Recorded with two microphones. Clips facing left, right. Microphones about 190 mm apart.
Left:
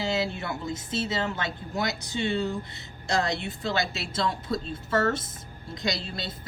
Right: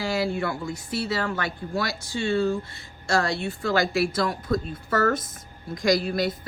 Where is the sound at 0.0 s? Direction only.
20° left (ahead or behind).